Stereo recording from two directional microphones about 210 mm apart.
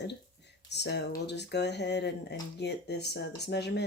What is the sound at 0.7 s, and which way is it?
Speech, 55° left (ahead or behind).